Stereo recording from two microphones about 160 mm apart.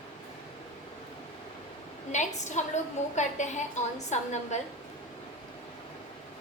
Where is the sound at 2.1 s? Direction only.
50° left (ahead or behind).